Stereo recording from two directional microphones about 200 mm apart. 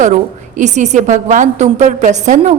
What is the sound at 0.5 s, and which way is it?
A woman's voice, 35° right (ahead or behind).